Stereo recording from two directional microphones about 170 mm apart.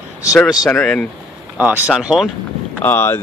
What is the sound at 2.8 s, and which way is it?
Speech, 15° left (ahead or behind).